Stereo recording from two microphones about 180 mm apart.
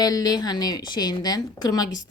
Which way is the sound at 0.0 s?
20° left (ahead or behind).